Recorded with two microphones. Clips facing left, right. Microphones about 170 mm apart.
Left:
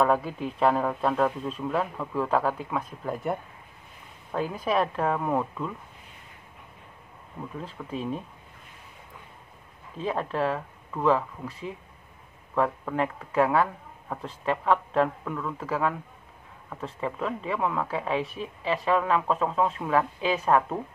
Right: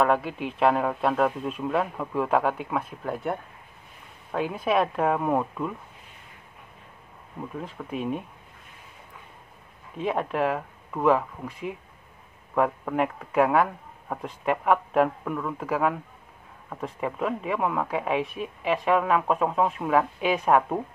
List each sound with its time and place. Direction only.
0.0 s speech: centre (ahead or behind)
3.0 s speech: centre (ahead or behind)
4.3 s speech: 10° right (ahead or behind)
7.5 s speech: 10° right (ahead or behind)
10.0 s speech: 10° right (ahead or behind)
18.2 s speech: 30° left (ahead or behind)
18.6 s speech: 15° right (ahead or behind)